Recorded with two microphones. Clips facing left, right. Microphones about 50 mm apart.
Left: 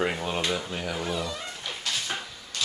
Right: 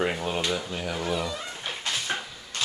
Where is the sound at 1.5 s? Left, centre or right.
Right.